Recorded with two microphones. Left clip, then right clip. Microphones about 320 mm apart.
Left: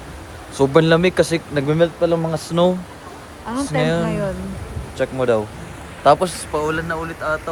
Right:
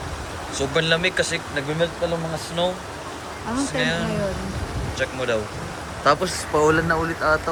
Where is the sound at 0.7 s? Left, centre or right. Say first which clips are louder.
Left 5 dB; centre.